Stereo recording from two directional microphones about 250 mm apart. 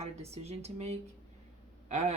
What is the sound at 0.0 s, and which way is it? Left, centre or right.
Speech, right.